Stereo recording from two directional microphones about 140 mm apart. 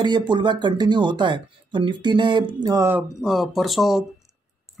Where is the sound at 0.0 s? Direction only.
35° right (ahead or behind).